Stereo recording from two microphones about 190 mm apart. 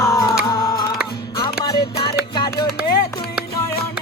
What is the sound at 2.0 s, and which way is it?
Music, 25° left (ahead or behind).